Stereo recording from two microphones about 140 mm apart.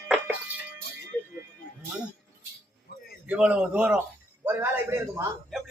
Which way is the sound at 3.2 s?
10° right (ahead or behind).